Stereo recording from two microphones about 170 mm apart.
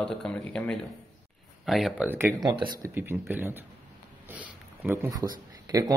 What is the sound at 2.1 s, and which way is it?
Speech, 15° right (ahead or behind).